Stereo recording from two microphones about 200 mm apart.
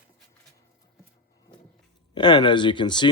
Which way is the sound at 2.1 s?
20° left (ahead or behind).